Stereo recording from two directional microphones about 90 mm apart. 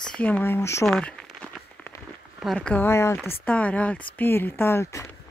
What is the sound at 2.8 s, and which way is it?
Speech, 30° left (ahead or behind).